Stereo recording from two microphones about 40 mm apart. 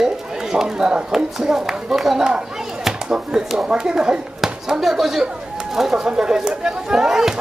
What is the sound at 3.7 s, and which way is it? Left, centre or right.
Speech, centre.